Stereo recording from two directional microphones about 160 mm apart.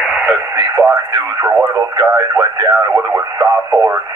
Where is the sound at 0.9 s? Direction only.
15° right (ahead or behind).